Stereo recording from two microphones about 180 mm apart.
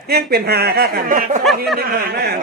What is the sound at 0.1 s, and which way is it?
Speech, 60° right (ahead or behind).